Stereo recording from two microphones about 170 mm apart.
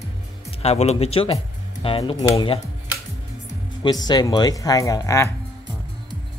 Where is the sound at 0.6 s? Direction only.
40° left (ahead or behind).